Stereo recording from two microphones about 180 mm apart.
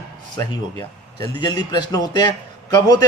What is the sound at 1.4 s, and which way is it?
Speech, 20° left (ahead or behind).